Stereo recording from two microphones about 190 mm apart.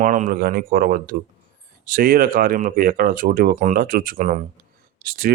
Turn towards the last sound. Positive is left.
turn(degrees=-50)  # may be behind; listen again after turning